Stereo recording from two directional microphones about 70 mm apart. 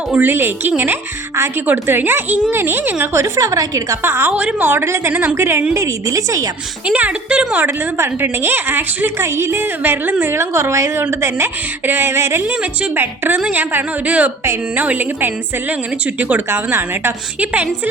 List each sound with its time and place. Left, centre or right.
0.1 s a woman's voice: right
3.2 s a woman's voice: right
4.0 s a woman's voice: right
4.3 s a woman's voice: right
4.7 s a woman's voice: right
5.7 s a woman's voice: right
6.8 s a woman's voice: centre
7.7 s a woman's voice: right
10.2 s a woman's voice: right
12.5 s a woman's voice: right
16.5 s a woman's voice: right
17.4 s a woman's voice: right